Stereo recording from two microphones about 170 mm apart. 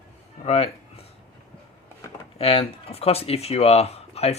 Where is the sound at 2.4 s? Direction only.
35° left (ahead or behind).